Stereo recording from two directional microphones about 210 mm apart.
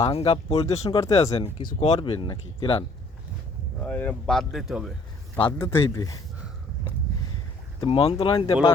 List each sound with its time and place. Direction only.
0.1 s speech: 30° left (ahead or behind)
3.8 s speech: 5° left (ahead or behind)
5.5 s speech: 10° left (ahead or behind)
7.8 s speech: 25° left (ahead or behind)